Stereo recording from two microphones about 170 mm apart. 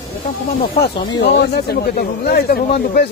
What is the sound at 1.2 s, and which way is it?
Speech, 75° left (ahead or behind).